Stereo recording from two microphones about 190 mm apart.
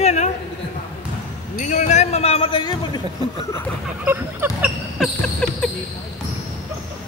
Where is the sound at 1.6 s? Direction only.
40° left (ahead or behind); by 2.8 s 25° left (ahead or behind).